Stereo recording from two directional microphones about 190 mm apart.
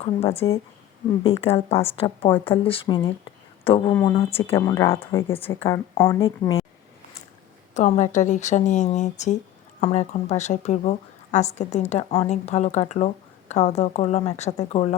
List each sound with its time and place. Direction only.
0.0 s a woman's voice: 35° left (ahead or behind)
3.9 s speech: 20° left (ahead or behind)
4.3 s a woman's voice: 30° left (ahead or behind)
4.5 s speech: 15° left (ahead or behind)
7.7 s a woman's voice: 40° left (ahead or behind)